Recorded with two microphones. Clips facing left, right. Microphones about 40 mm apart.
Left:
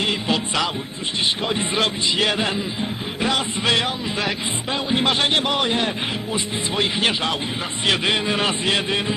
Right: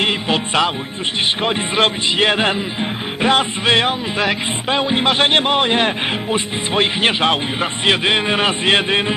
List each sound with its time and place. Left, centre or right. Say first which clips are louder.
0.0 s music: right 4 dB; right
1.8 s speech: right 6 dB; right
5.1 s speech: right 5 dB; right
7.9 s a man's voice: right 4 dB; right